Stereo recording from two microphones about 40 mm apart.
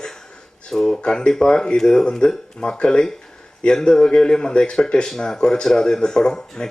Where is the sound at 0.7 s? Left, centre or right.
Centre.